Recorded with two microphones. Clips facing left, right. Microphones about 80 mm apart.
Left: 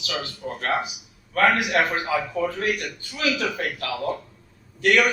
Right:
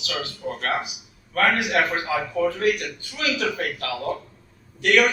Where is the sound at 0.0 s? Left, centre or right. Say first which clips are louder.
Right 1 dB; left.